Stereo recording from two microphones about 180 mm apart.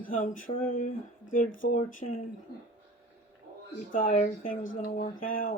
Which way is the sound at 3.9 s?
50° left (ahead or behind).